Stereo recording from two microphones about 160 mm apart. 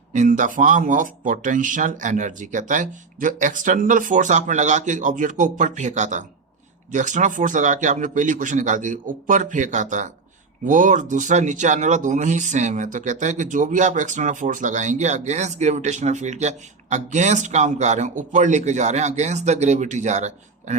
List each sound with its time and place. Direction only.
0.1 s speech: 50° right (ahead or behind)